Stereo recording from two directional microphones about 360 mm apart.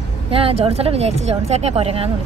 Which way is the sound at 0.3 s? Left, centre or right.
Centre.